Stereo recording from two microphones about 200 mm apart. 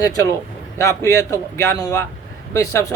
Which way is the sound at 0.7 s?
15° left (ahead or behind).